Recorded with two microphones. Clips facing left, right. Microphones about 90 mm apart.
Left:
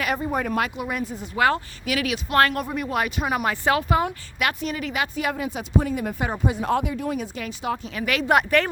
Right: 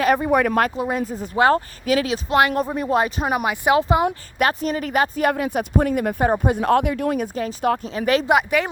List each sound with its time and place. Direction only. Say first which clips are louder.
0.2 s speech: right 7 dB; 70° right (ahead or behind)
0.8 s speech: right 5 dB; 30° right (ahead or behind)
2.3 s speech: right 2 dB; 20° right (ahead or behind)
2.6 s speech: right 5 dB; 30° right (ahead or behind)
3.4 s speech: right 5 dB; 15° right (ahead or behind)
4.4 s speech: right 4 dB; 40° right (ahead or behind)
7.9 s speech: right 7 dB; 35° right (ahead or behind)
8.3 s speech: right 1 dB; 5° right (ahead or behind)